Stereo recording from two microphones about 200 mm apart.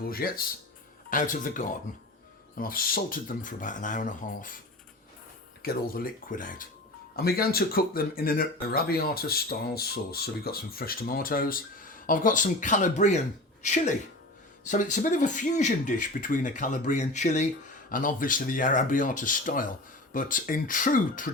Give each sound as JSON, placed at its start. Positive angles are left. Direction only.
{"t": 0.0, "sound": "speech", "side_deg": 50}
{"t": 5.6, "sound": "speech", "side_deg": 45}